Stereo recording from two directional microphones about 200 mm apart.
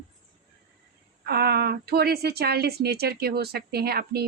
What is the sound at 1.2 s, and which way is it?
A woman's voice, 50° right (ahead or behind).